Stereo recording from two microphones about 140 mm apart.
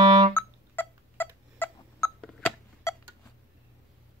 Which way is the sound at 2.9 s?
20° left (ahead or behind).